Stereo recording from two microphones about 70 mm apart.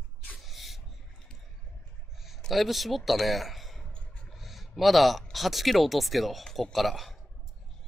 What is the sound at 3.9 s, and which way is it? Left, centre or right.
Vehicle, centre.